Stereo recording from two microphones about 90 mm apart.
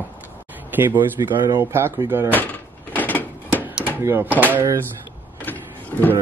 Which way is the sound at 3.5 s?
15° right (ahead or behind).